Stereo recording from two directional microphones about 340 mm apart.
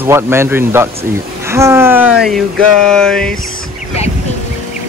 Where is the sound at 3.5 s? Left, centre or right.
Centre.